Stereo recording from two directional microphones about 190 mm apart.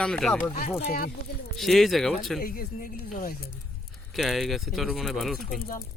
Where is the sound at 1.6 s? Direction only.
Centre (ahead or behind).